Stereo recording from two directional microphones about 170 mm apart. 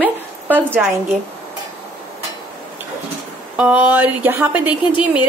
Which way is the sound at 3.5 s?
10° right (ahead or behind).